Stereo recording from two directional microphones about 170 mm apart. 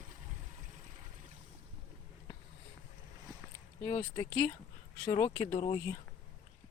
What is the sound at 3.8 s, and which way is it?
Speech, 20° left (ahead or behind).